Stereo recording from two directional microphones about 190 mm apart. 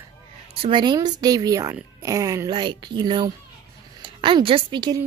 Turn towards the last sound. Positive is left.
turn(degrees=-25)  # may be behind; listen again after turning